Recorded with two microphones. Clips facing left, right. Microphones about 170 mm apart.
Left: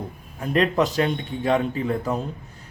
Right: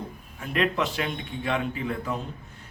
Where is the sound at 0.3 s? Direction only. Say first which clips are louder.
Left 6 dB; 40° left (ahead or behind).